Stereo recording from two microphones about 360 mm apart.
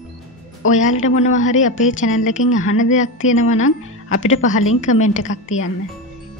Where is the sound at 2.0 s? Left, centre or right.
Left.